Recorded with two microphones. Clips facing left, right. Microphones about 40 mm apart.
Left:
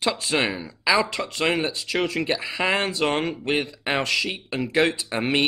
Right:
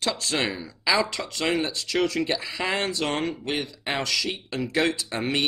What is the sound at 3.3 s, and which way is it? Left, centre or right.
Speech, left.